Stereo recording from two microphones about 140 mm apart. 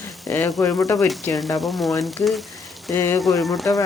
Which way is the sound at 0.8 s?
25° left (ahead or behind).